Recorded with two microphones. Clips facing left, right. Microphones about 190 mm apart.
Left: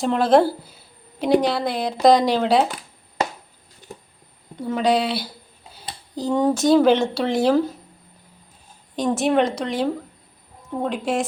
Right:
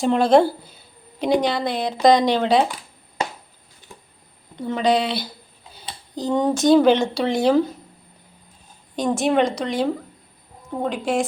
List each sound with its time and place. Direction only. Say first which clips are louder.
0.0 s speech: right 1 dB; centre (ahead or behind)
4.5 s speech: even; 5° left (ahead or behind)
9.0 s speech: even; centre (ahead or behind)